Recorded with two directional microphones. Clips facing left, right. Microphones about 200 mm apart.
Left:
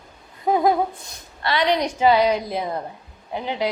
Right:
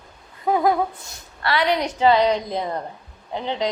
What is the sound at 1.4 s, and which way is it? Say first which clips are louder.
A woman's voice: even; 20° left (ahead or behind).